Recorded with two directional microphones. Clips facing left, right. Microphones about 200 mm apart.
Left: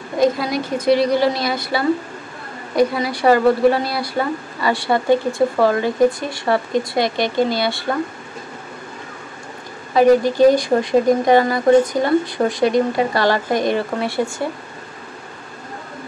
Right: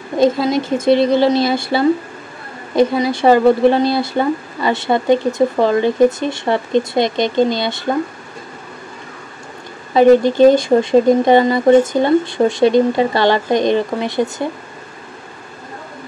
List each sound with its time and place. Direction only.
0.2 s speech: 25° right (ahead or behind)
9.9 s speech: 25° right (ahead or behind)